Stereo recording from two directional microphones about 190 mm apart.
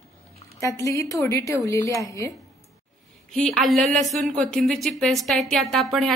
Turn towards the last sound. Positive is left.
turn(degrees=0)  # may be behind; listen again after turning